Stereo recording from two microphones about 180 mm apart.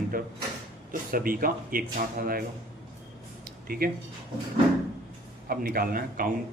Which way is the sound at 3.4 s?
55° right (ahead or behind).